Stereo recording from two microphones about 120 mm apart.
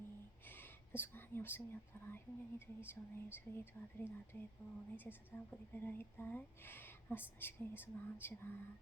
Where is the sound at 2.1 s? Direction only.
20° left (ahead or behind).